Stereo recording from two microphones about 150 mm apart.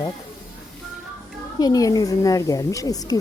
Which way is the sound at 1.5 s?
25° left (ahead or behind).